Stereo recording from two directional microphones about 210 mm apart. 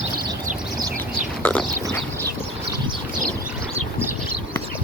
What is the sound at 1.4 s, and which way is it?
Pig, 10° left (ahead or behind).